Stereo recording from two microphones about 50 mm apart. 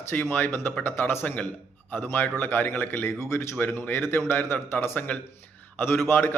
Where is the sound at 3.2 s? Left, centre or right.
Left.